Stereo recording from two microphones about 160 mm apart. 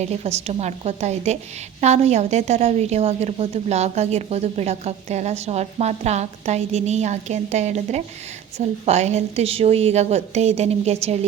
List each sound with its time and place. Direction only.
0.0 s a woman's voice: 45° right (ahead or behind)